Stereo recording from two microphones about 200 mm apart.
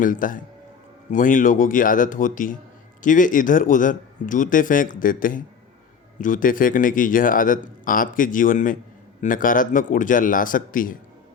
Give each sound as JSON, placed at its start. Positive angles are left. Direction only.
{"t": 0.0, "sound": "a man's voice", "side_deg": 40}